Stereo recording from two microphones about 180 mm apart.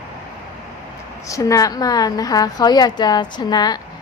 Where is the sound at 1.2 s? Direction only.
20° left (ahead or behind).